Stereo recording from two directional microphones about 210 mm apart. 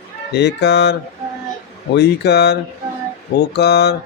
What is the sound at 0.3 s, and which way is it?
Speech, 55° left (ahead or behind).